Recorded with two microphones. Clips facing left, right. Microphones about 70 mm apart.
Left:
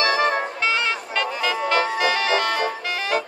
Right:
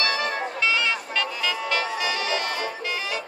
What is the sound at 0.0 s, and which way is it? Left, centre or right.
Music, left.